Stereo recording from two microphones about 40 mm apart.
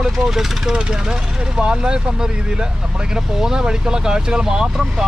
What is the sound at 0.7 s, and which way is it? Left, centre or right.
Speech, right.